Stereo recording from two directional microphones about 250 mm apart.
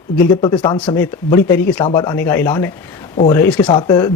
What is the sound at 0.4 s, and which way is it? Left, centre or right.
Speech, centre.